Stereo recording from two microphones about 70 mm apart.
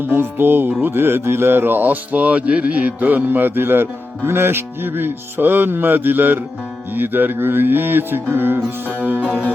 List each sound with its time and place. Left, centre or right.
0.0 s speech: right